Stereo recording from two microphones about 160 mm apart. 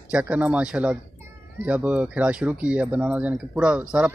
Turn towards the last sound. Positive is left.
turn(degrees=-5)  # may be behind; listen again after turning